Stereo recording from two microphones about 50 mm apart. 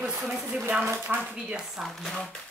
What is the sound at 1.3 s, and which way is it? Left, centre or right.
Speech, centre.